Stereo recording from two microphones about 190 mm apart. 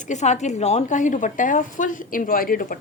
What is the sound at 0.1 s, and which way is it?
A woman's voice, 35° left (ahead or behind).